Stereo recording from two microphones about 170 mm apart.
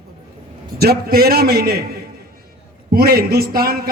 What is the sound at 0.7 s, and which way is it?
A man's voice, 65° right (ahead or behind).